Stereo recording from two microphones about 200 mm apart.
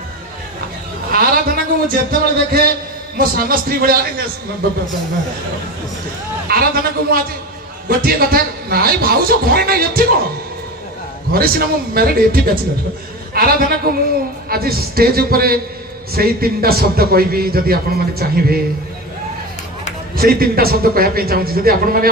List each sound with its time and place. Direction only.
1.1 s a man's voice: 50° right (ahead or behind)
6.5 s a man's voice: 50° right (ahead or behind)
11.3 s a man's voice: 50° right (ahead or behind)
20.2 s a man's voice: 50° right (ahead or behind)